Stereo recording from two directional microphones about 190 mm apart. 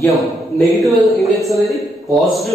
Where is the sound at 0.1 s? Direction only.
Centre (ahead or behind).